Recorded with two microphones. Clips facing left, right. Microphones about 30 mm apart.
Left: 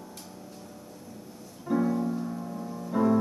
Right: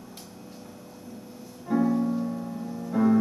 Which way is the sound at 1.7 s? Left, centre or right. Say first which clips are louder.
Right 3 dB; centre.